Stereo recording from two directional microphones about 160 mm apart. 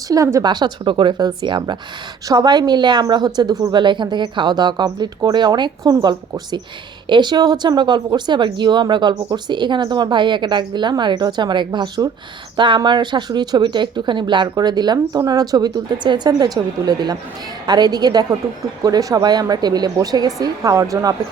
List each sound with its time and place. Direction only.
0.1 s speech: 20° right (ahead or behind)